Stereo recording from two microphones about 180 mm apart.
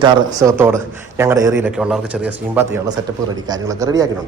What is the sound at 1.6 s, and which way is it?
A man's voice, 5° right (ahead or behind).